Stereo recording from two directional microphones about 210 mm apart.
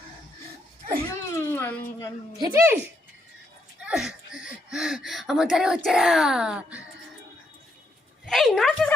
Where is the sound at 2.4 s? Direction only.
15° right (ahead or behind).